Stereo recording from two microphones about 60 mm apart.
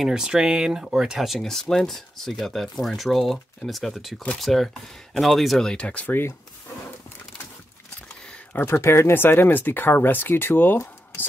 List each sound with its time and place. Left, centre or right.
0.0 s speech: centre
1.4 s speech: centre
5.6 s speech: centre
6.0 s speech: left
8.5 s speech: left